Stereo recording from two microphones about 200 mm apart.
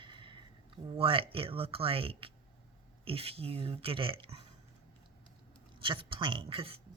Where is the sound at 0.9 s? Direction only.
25° right (ahead or behind).